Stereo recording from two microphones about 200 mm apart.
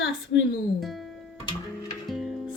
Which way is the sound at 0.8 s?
Centre (ahead or behind).